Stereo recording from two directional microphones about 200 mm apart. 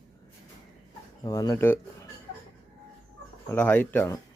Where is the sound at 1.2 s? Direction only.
20° left (ahead or behind).